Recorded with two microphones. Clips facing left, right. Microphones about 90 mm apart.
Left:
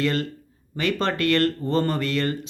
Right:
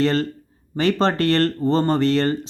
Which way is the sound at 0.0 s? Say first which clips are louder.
Right 5 dB; 35° right (ahead or behind).